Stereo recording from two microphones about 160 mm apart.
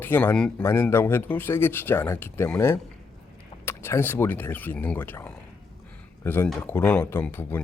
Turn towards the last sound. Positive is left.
turn(degrees=15)  # may be behind; listen again after turning